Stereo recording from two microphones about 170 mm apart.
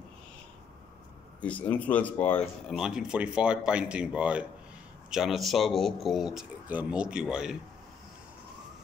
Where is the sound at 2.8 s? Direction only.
5° right (ahead or behind).